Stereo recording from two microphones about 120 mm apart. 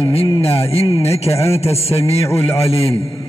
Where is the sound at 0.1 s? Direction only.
55° left (ahead or behind).